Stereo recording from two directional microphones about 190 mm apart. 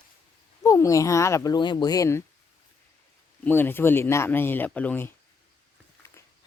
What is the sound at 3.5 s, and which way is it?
Speech, 10° left (ahead or behind).